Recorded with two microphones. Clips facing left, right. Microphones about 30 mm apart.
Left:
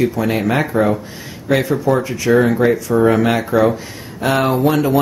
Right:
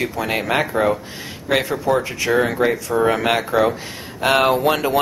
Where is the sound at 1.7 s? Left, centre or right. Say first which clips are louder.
Left 3 dB; centre.